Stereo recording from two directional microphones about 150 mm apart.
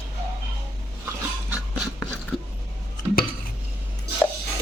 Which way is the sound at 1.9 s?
10° left (ahead or behind).